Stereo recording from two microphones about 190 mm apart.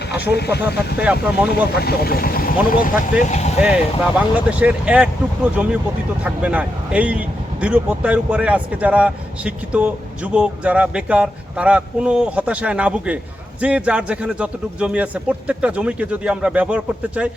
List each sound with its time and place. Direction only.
0.1 s speech: 60° left (ahead or behind)
0.9 s a man's voice: 5° right (ahead or behind)
1.7 s speech: 55° left (ahead or behind); by 3.5 s 40° left (ahead or behind)
4.4 s a man's voice: 5° right (ahead or behind)